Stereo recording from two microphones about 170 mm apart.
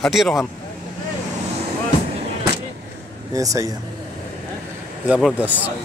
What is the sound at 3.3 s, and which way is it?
Speech, 20° right (ahead or behind).